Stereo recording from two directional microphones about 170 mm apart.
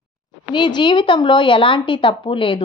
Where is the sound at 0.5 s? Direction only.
25° left (ahead or behind).